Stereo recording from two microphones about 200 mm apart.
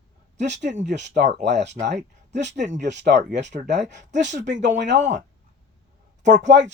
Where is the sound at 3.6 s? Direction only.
60° right (ahead or behind).